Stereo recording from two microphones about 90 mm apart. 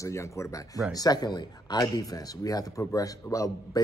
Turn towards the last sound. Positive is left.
turn(degrees=40)  # may be behind; listen again after turning